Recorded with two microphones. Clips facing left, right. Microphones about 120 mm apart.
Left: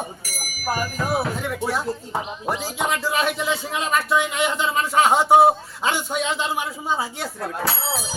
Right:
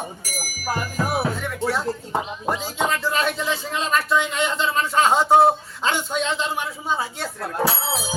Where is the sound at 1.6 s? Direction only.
15° left (ahead or behind).